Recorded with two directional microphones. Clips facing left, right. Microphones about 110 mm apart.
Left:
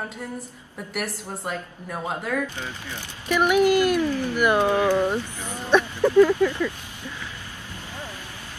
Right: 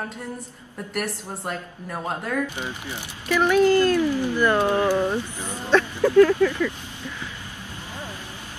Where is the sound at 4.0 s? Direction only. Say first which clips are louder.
Right 2 dB; 15° right (ahead or behind).